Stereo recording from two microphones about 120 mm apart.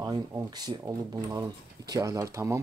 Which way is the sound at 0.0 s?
35° right (ahead or behind).